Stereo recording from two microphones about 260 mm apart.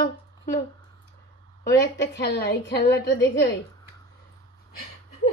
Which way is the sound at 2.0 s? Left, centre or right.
Left.